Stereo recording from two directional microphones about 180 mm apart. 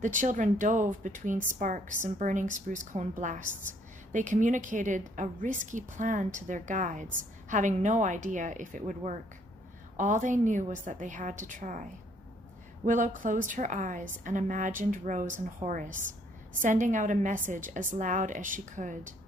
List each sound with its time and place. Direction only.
0.0 s a woman's voice: 45° right (ahead or behind)
12.8 s a woman's voice: 45° right (ahead or behind)